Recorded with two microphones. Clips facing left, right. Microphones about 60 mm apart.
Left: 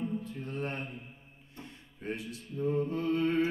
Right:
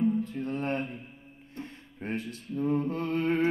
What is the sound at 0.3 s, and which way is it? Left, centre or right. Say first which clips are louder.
Mantra: right 6 dB; right.